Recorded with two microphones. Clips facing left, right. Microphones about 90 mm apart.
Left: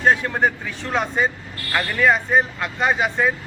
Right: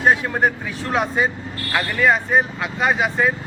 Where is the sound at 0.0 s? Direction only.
5° right (ahead or behind).